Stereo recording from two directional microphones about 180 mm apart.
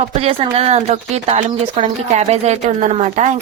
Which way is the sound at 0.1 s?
35° right (ahead or behind).